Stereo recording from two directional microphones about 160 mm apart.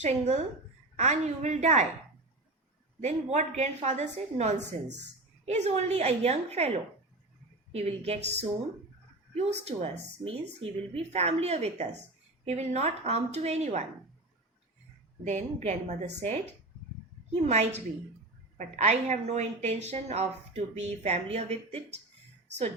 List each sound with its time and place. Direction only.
0.0 s a woman's voice: 45° right (ahead or behind)
3.0 s a woman's voice: 45° right (ahead or behind)
15.2 s a woman's voice: 50° right (ahead or behind)
17.4 s a woman's voice: 45° right (ahead or behind)